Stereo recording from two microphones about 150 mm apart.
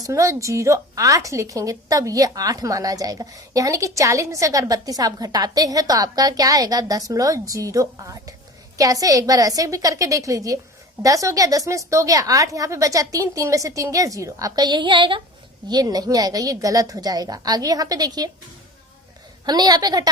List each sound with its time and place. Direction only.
0.0 s a woman's voice: 20° right (ahead or behind)
19.5 s a woman's voice: 25° right (ahead or behind)